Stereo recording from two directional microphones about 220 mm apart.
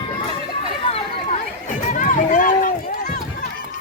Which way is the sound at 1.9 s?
35° left (ahead or behind).